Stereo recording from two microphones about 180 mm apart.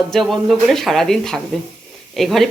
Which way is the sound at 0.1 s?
Centre (ahead or behind).